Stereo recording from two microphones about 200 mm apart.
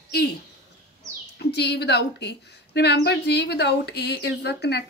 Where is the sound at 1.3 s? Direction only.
55° left (ahead or behind).